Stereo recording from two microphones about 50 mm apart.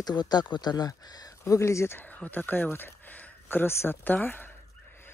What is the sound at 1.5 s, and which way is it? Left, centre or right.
Speech, left.